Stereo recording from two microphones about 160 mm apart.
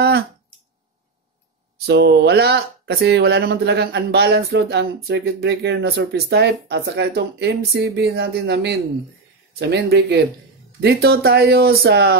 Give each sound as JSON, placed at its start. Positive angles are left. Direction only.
{"t": 1.9, "sound": "speech", "side_deg": -90}